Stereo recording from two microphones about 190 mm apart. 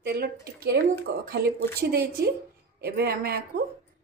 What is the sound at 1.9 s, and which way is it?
A woman's voice, 60° right (ahead or behind).